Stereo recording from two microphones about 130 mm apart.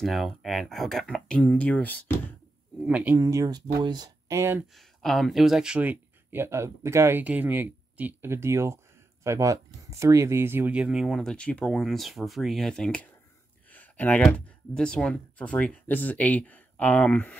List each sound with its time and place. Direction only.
0.0 s speech: centre (ahead or behind)
2.8 s speech: 10° right (ahead or behind)
3.2 s speech: 25° right (ahead or behind)
4.4 s speech: 20° right (ahead or behind)
4.7 s speech: centre (ahead or behind)